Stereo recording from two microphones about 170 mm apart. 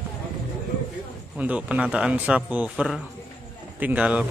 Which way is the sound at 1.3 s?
10° right (ahead or behind).